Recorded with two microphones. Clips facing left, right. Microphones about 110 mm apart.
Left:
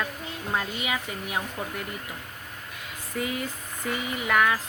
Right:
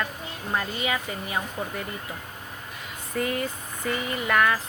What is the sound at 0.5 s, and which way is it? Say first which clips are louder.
Speech: right 2 dB; 5° left (ahead or behind).